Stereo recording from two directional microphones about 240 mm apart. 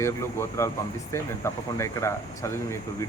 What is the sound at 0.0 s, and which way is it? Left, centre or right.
Speech, centre.